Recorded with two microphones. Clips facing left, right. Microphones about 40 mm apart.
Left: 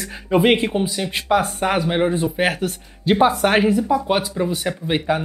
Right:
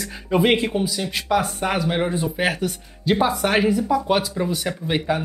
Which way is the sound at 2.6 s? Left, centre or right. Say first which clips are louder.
Left 1 dB; left.